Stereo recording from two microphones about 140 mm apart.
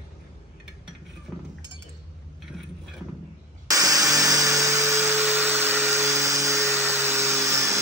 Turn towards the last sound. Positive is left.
turn(degrees=-20)  # may be behind; listen again after turning